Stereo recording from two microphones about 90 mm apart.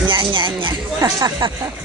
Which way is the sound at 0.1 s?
65° right (ahead or behind).